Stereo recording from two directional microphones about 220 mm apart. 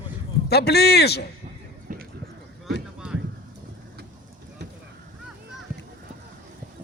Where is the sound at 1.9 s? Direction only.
40° right (ahead or behind).